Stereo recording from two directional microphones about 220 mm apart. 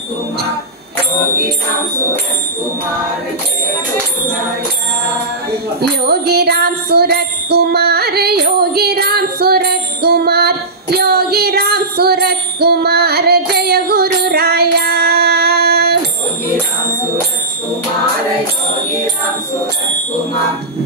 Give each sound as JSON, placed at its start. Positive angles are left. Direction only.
{"t": 5.8, "sound": "music", "side_deg": -45}